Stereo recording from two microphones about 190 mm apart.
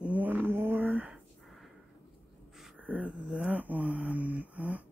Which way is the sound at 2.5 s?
5° right (ahead or behind).